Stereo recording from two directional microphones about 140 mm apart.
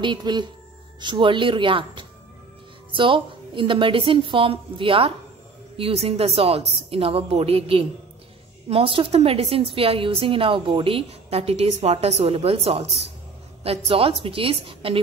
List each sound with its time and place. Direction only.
0.0 s a woman's voice: 35° right (ahead or behind)